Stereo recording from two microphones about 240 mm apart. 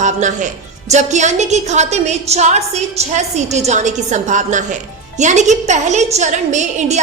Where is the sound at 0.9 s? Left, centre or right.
Right.